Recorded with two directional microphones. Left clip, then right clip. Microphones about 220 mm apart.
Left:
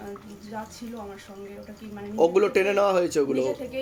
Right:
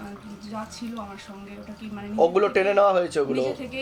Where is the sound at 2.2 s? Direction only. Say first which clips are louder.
Right 1 dB; 35° left (ahead or behind).